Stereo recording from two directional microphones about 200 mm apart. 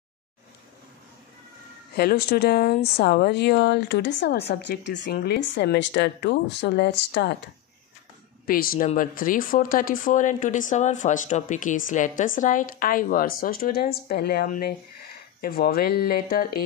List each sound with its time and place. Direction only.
2.0 s speech: 50° left (ahead or behind)
8.5 s speech: 45° left (ahead or behind)